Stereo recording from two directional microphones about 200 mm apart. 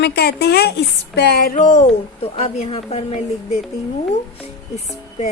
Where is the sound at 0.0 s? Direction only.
55° left (ahead or behind).